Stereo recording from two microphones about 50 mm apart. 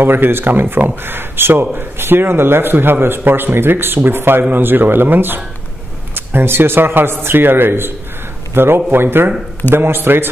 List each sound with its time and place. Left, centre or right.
0.0 s a man's voice: right